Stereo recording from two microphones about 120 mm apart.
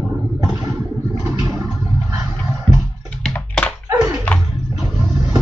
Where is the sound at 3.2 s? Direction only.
5° left (ahead or behind).